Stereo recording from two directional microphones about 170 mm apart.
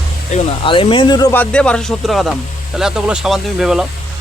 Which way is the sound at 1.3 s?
10° left (ahead or behind).